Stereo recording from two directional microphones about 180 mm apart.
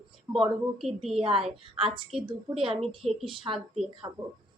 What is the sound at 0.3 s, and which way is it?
Speech, centre (ahead or behind).